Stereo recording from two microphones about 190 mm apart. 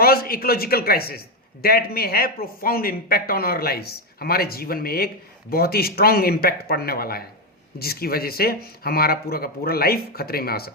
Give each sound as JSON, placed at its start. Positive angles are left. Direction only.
{"t": 0.0, "sound": "speech", "side_deg": 50}